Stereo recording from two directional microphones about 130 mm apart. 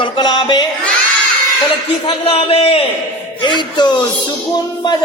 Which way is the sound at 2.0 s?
45° left (ahead or behind).